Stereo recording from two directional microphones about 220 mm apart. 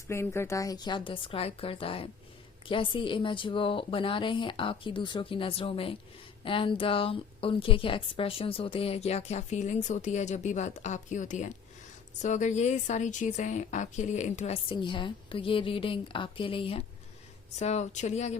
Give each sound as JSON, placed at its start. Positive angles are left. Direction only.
{"t": 0.1, "sound": "a woman's voice", "side_deg": 10}